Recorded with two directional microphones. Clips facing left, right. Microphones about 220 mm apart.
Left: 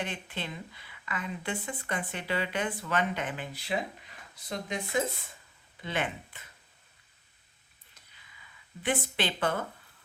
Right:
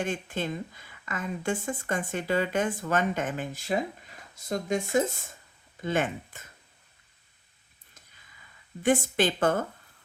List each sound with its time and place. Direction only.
0.0 s speech: 45° right (ahead or behind)
8.8 s speech: 45° right (ahead or behind)